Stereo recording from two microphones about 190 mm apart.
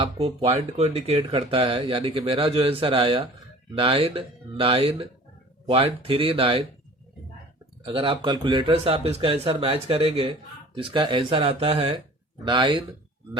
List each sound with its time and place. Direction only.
0.0 s speech: 30° right (ahead or behind)
7.9 s speech: 25° right (ahead or behind)